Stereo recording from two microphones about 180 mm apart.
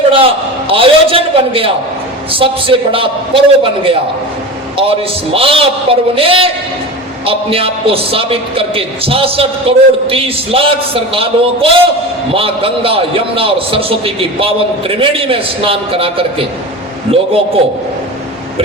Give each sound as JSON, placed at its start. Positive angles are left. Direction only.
{"t": 0.7, "sound": "a man's voice", "side_deg": -30}